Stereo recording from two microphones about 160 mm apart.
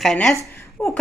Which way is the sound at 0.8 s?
15° left (ahead or behind).